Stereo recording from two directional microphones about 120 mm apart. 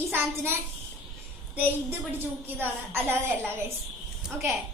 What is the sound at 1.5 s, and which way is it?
A woman's voice, 15° right (ahead or behind).